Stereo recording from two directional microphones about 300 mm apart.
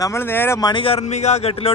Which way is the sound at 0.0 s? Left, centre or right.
Centre.